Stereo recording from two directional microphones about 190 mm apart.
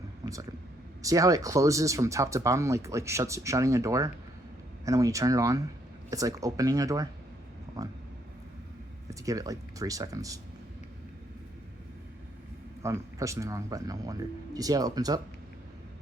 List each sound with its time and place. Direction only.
0.2 s vehicle: 20° right (ahead or behind)
1.0 s speech: 15° right (ahead or behind)
9.0 s speech: 20° right (ahead or behind)
12.8 s speech: 15° right (ahead or behind)